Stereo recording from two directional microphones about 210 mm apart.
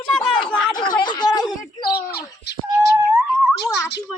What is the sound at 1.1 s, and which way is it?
Speech, 20° left (ahead or behind).